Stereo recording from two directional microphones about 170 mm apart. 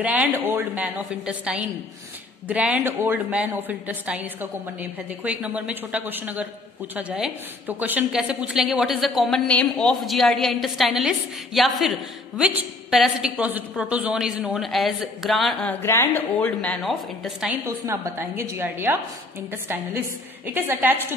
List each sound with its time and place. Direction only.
0.0 s a woman's voice: 10° right (ahead or behind)
15.8 s a woman's voice: 15° left (ahead or behind); by 17.6 s centre (ahead or behind)
17.6 s a woman's voice: 15° right (ahead or behind)
20.4 s a woman's voice: 10° right (ahead or behind)